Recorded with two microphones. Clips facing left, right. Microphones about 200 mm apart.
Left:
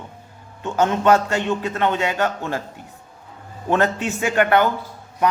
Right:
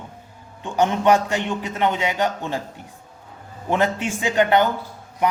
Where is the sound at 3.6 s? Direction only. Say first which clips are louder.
Left 1 dB; 10° right (ahead or behind).